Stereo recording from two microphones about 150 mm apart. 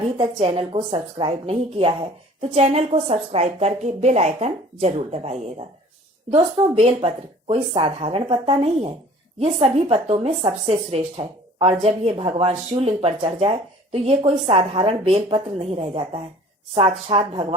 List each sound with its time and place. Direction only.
0.2 s a woman's voice: 35° right (ahead or behind)